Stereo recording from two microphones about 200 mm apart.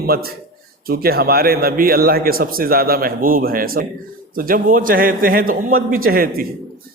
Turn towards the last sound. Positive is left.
turn(degrees=-50)  # may be behind; listen again after turning